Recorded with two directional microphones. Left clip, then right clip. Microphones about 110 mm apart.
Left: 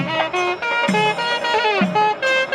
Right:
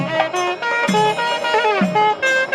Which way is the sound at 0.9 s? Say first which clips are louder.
Right 2 dB; centre (ahead or behind).